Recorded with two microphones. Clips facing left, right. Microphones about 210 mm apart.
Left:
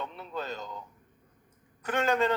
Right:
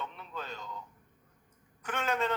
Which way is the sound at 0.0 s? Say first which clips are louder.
Left 5 dB; 35° left (ahead or behind).